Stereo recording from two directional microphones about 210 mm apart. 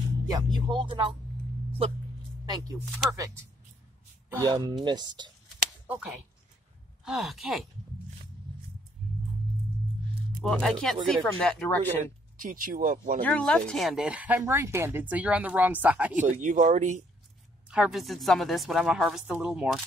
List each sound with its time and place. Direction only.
0.3 s speech: 25° right (ahead or behind)
4.3 s speech: 15° right (ahead or behind)
5.9 s a woman's voice: 5° right (ahead or behind)
10.4 s a woman's voice: centre (ahead or behind)
12.4 s speech: 40° right (ahead or behind)
13.2 s speech: 5° left (ahead or behind)
16.4 s speech: 35° right (ahead or behind)
17.6 s a woman's voice: centre (ahead or behind)